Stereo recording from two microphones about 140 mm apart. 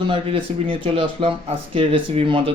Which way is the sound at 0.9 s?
40° right (ahead or behind).